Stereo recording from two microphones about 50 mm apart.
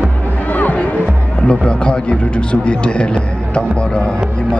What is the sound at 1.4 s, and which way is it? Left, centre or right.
A man's voice, centre.